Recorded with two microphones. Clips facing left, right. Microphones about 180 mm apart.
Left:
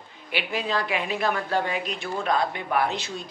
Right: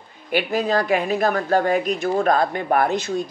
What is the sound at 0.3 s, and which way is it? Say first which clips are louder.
Speech: right 7 dB; 45° right (ahead or behind).